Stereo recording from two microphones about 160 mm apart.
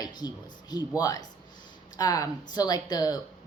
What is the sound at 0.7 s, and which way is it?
Speech, 25° left (ahead or behind).